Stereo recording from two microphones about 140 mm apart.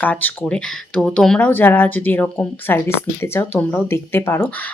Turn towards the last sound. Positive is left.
turn(degrees=15)  # may be behind; listen again after turning